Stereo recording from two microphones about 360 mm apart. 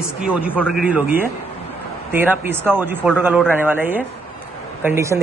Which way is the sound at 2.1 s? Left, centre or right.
Centre.